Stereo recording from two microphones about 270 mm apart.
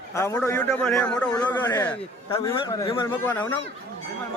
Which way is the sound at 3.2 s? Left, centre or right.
Centre.